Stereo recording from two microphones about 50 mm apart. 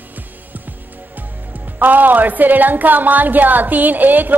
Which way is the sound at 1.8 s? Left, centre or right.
Right.